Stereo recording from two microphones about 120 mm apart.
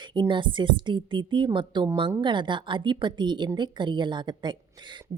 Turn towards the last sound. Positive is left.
turn(degrees=-40)  # may be behind; listen again after turning